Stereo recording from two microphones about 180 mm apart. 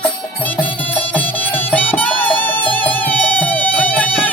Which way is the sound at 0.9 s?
10° left (ahead or behind).